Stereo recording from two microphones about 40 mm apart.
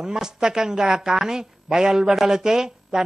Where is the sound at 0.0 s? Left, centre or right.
Centre.